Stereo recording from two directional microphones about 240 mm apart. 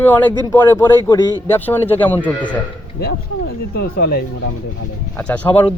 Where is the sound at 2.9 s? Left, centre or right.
Left.